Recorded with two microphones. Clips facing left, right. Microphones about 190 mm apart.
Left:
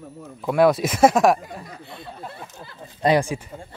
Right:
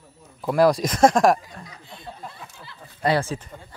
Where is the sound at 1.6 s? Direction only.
55° left (ahead or behind).